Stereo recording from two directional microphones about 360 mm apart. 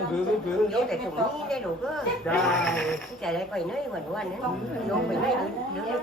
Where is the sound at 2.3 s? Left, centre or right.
Centre.